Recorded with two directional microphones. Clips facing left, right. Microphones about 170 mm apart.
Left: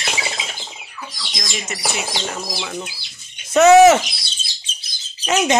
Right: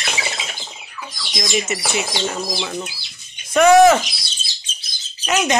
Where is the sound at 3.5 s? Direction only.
25° left (ahead or behind).